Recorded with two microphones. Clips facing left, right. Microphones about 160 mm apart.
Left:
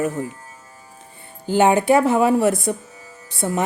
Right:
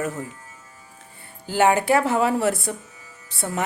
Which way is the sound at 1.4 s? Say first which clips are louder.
Left 3 dB; 20° left (ahead or behind).